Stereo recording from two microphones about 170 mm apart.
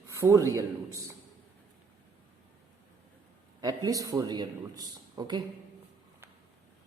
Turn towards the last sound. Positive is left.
turn(degrees=-25)  # may be behind; listen again after turning